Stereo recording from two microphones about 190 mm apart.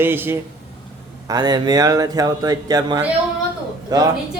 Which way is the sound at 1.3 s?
20° right (ahead or behind).